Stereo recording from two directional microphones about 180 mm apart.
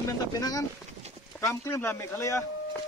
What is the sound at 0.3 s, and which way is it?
Speech, 20° left (ahead or behind).